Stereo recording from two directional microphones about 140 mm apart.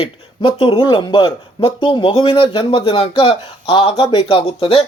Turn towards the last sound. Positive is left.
turn(degrees=45)  # may be behind; listen again after turning